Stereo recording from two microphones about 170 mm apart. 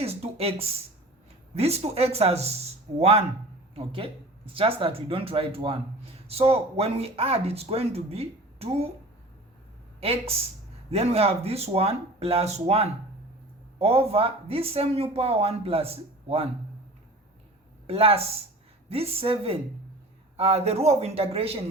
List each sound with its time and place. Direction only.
0.0 s a man's voice: 35° right (ahead or behind)
10.0 s a man's voice: 35° right (ahead or behind)
17.8 s a man's voice: 35° right (ahead or behind)